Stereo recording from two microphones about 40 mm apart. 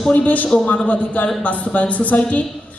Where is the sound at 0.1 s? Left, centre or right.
Left.